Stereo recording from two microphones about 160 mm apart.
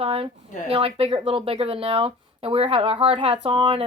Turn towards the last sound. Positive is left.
turn(degrees=-35)  # may be behind; listen again after turning